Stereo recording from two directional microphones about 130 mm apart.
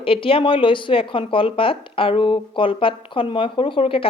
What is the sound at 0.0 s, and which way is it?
Speech, 45° left (ahead or behind).